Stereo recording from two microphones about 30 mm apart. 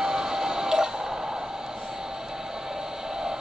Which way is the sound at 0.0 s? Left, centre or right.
Centre.